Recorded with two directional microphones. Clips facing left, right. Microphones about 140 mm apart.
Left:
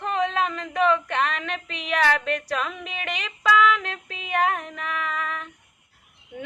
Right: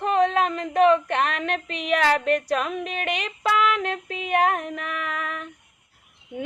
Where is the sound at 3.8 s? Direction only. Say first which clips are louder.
Right 7 dB; 55° right (ahead or behind).